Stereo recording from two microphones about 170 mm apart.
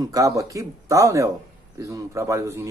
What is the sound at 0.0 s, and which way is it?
Speech, 20° right (ahead or behind).